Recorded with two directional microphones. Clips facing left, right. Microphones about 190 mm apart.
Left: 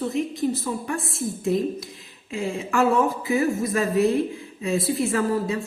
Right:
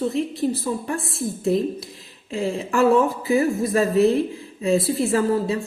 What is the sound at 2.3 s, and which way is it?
A woman's voice, 35° right (ahead or behind).